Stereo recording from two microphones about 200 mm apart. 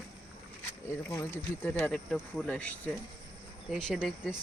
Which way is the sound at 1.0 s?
10° left (ahead or behind).